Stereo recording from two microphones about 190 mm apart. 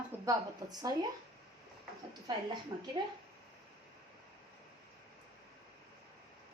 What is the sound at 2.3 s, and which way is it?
Speech, 20° right (ahead or behind).